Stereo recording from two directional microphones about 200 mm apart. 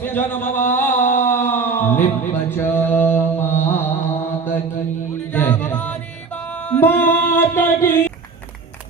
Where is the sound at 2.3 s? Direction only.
10° left (ahead or behind).